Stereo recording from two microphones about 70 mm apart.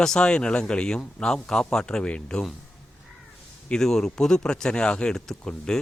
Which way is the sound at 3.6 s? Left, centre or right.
Centre.